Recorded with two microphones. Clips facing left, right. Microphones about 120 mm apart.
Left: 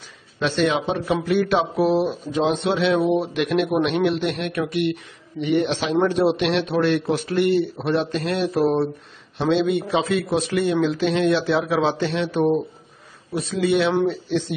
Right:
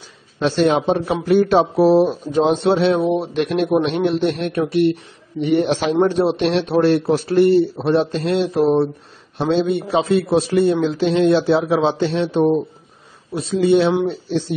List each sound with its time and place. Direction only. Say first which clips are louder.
0.4 s speech: right 4 dB; 35° right (ahead or behind)
5.9 s speech: even; 30° right (ahead or behind)
9.4 s speech: right 2 dB; 40° right (ahead or behind)